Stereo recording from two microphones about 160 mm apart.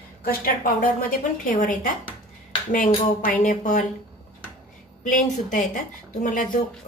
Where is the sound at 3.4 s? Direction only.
55° left (ahead or behind).